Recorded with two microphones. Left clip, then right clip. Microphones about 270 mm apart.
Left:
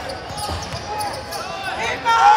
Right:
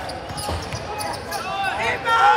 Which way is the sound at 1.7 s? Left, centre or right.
Left.